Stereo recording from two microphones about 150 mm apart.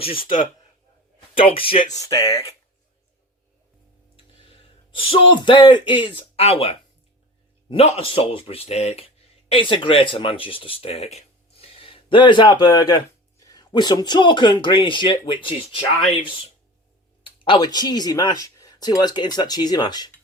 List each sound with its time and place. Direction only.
0.0 s speech: 35° left (ahead or behind)
1.4 s speech: 40° left (ahead or behind)
1.9 s speech: 25° left (ahead or behind)
4.4 s speech: 35° left (ahead or behind)